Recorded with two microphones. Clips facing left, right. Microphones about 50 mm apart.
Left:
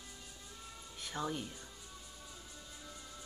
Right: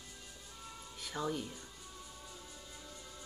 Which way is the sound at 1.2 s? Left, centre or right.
Left.